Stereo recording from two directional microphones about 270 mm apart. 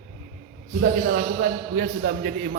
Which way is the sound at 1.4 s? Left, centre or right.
Right.